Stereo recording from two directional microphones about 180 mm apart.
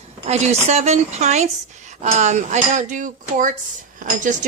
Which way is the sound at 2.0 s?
40° right (ahead or behind).